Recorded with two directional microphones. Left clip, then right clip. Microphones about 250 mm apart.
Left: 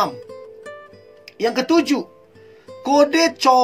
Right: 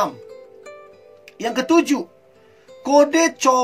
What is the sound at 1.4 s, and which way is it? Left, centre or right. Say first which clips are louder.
Speech: even; centre.